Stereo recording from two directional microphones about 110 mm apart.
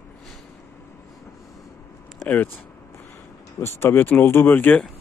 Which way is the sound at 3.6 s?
25° left (ahead or behind).